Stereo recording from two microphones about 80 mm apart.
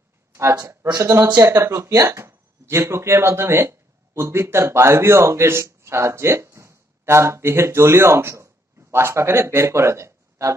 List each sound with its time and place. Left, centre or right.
0.3 s speech: right